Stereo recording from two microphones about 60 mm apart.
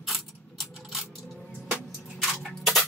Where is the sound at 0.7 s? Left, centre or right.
Centre.